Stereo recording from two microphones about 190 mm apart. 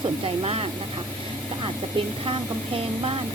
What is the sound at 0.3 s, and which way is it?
Speech, 30° right (ahead or behind).